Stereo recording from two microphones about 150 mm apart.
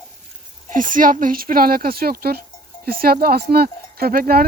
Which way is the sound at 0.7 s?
60° right (ahead or behind).